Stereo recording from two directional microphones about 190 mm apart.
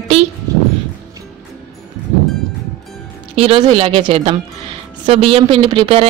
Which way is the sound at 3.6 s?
25° right (ahead or behind).